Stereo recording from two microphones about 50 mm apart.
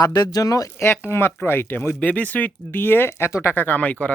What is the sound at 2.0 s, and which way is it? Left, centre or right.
Speech, left.